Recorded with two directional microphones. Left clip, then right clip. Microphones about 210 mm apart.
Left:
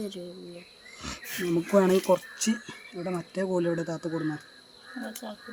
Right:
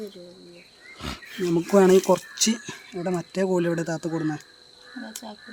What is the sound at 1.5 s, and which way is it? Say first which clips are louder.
Speech: right 5 dB; 30° right (ahead or behind).